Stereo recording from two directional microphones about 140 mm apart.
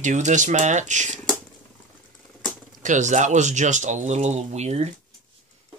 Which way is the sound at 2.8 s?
60° right (ahead or behind).